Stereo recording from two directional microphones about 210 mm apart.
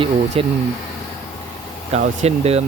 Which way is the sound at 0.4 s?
25° right (ahead or behind).